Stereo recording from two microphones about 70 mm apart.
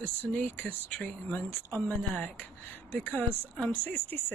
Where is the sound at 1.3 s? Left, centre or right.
Left.